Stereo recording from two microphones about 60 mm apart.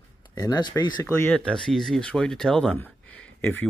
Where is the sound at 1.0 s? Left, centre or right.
Left.